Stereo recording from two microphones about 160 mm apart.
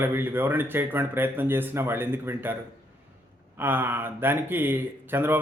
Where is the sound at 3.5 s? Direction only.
15° right (ahead or behind).